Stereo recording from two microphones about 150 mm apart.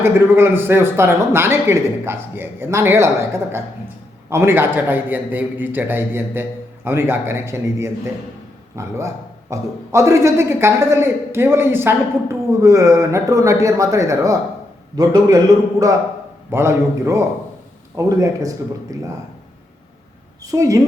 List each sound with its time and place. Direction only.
0.0 s a man's voice: 15° right (ahead or behind)
16.5 s a man's voice: 15° right (ahead or behind)
20.4 s a man's voice: 25° right (ahead or behind)